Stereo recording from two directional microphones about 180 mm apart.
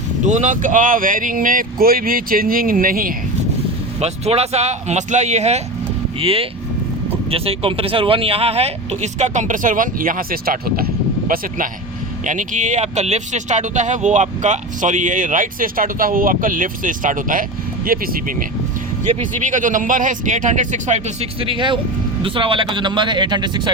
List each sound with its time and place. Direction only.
0.3 s speech: 40° right (ahead or behind)
4.0 s speech: 35° right (ahead or behind)